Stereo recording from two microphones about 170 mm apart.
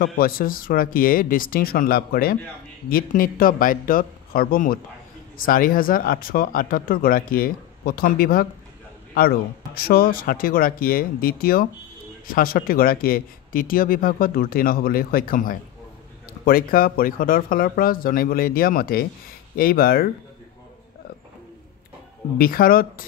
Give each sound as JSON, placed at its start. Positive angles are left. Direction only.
{"t": 0.0, "sound": "speech", "side_deg": 60}
{"t": 22.4, "sound": "speech", "side_deg": 60}